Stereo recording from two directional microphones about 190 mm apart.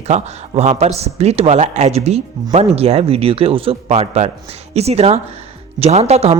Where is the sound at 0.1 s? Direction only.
35° right (ahead or behind).